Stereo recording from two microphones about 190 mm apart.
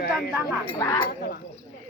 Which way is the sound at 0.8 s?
20° left (ahead or behind).